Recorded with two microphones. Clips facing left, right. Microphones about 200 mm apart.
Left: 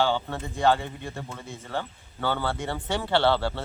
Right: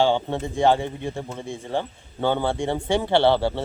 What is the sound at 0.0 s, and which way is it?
Speech, 25° right (ahead or behind).